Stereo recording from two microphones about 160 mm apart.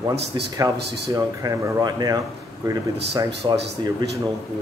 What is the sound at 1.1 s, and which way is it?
Speech, 20° right (ahead or behind).